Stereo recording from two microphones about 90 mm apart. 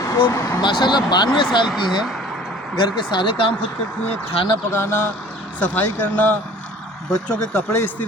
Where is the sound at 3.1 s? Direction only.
65° left (ahead or behind).